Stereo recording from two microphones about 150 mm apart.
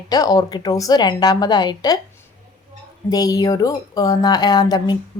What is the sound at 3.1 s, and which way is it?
Speech, 25° left (ahead or behind).